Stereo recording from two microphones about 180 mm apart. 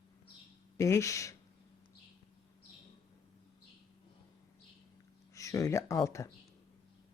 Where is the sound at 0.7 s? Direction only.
15° left (ahead or behind).